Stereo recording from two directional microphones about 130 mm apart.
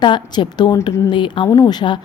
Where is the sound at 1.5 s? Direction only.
20° left (ahead or behind).